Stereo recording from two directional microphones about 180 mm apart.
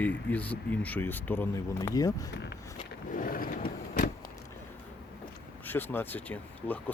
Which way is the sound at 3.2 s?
50° left (ahead or behind).